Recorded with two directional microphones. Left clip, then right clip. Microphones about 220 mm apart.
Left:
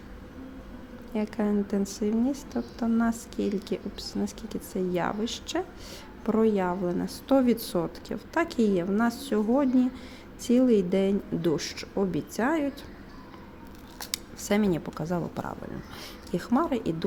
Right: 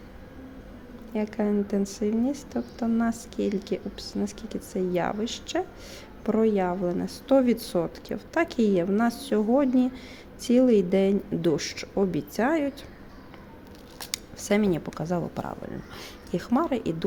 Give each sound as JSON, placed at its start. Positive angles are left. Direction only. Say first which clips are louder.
{"t": 1.1, "sound": "a woman's voice", "louder": "right 2 dB", "side_deg": 0}
{"t": 14.0, "sound": "a woman's voice", "louder": "even", "side_deg": 0}